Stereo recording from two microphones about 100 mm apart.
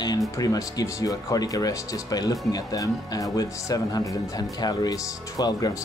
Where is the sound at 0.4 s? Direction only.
35° left (ahead or behind).